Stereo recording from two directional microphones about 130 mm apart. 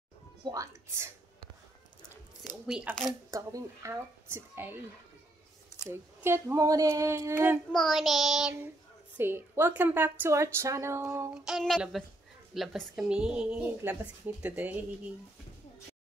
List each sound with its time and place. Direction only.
0.5 s a woman's voice: 25° right (ahead or behind)
2.6 s a woman's voice: 5° right (ahead or behind)
3.3 s a woman's voice: 25° right (ahead or behind)
5.9 s a woman's voice: 20° right (ahead or behind)
7.7 s a woman's voice: centre (ahead or behind)
9.1 s a woman's voice: 20° right (ahead or behind)
11.3 s a woman's voice: 5° right (ahead or behind)